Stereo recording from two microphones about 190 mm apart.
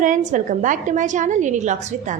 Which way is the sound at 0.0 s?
40° right (ahead or behind).